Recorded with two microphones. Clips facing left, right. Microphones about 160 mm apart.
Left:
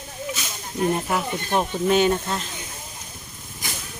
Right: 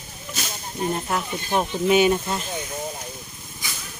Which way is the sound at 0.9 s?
5° left (ahead or behind).